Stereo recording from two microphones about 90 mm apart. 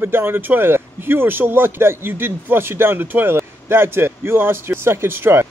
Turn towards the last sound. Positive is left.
turn(degrees=-25)  # may be behind; listen again after turning